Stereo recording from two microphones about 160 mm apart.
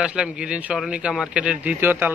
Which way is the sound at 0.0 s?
5° right (ahead or behind).